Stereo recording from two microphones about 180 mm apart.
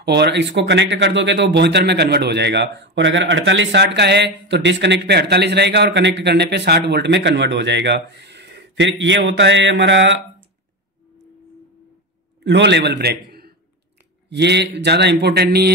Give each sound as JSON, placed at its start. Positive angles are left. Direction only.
{"t": 0.0, "sound": "speech", "side_deg": -65}
{"t": 12.4, "sound": "a man's voice", "side_deg": -75}
{"t": 14.3, "sound": "speech", "side_deg": -70}